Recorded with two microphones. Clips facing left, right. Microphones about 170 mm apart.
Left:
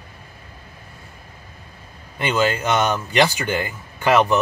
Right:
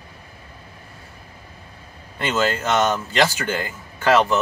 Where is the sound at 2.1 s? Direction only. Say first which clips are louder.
Left 2 dB; 15° left (ahead or behind).